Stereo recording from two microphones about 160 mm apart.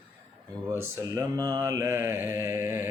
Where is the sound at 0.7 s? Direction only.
20° right (ahead or behind).